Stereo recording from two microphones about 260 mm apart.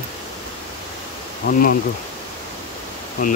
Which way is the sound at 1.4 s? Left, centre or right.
Left.